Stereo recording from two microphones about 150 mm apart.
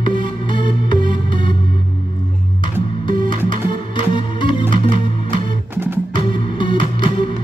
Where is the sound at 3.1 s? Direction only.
30° left (ahead or behind).